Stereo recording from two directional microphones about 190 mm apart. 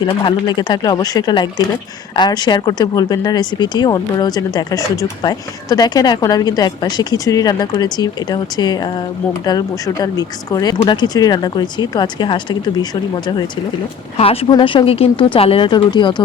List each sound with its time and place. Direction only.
0.0 s speech: 25° left (ahead or behind)